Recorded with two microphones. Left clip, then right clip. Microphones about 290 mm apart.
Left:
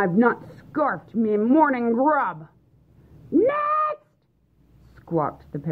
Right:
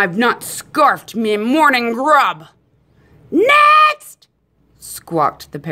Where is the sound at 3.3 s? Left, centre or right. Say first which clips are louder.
Right 11 dB; right.